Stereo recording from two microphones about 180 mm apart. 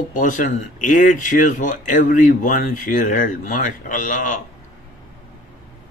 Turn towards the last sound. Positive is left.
turn(degrees=45)  # may be behind; listen again after turning